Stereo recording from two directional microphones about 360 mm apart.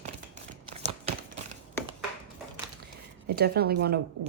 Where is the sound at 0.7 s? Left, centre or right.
Right.